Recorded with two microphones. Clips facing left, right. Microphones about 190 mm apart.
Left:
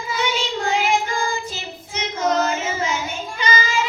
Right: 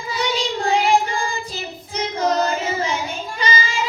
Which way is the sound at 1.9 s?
35° right (ahead or behind).